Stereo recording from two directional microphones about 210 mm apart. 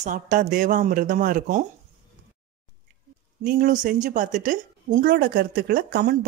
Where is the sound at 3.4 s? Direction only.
40° right (ahead or behind).